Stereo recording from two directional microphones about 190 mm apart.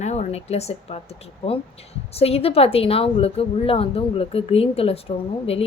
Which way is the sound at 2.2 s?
30° left (ahead or behind).